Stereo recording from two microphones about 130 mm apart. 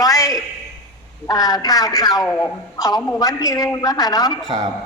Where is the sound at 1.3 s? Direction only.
30° left (ahead or behind).